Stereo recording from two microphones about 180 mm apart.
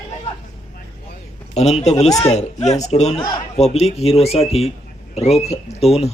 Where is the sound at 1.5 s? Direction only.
40° left (ahead or behind).